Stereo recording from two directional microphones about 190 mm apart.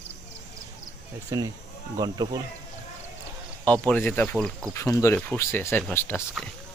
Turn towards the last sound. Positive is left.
turn(degrees=10)  # may be behind; listen again after turning